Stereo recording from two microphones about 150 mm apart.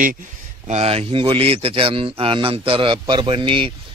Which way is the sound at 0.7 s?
45° right (ahead or behind).